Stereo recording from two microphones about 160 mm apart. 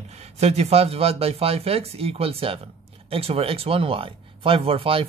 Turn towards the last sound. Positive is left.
turn(degrees=-35)  # may be behind; listen again after turning